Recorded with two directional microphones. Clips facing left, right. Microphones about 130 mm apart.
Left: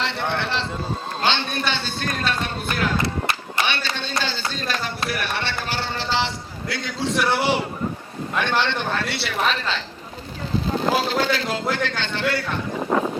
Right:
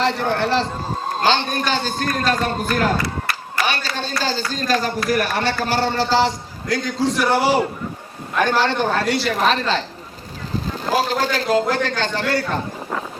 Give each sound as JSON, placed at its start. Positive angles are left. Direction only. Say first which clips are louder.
{"t": 0.0, "sound": "a man's voice", "louder": "right 6 dB", "side_deg": -40}
{"t": 3.0, "sound": "a sound", "louder": "left 1 dB", "side_deg": 25}
{"t": 4.2, "sound": "a man's voice", "louder": "right 6 dB", "side_deg": -40}
{"t": 10.9, "sound": "a man's voice", "louder": "right 2 dB", "side_deg": -40}